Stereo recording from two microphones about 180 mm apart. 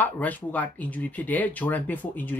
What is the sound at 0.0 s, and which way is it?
Speech, 10° left (ahead or behind).